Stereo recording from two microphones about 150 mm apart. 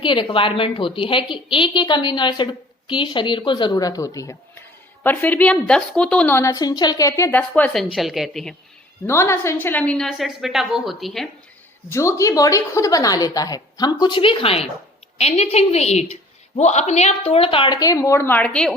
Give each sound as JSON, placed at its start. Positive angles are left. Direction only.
{"t": 0.0, "sound": "a woman's voice", "side_deg": 30}
{"t": 7.3, "sound": "a woman's voice", "side_deg": 10}
{"t": 9.0, "sound": "a woman's voice", "side_deg": 15}
{"t": 11.9, "sound": "a woman's voice", "side_deg": 20}